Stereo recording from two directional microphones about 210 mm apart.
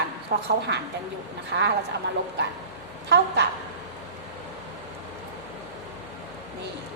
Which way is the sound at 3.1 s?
55° right (ahead or behind).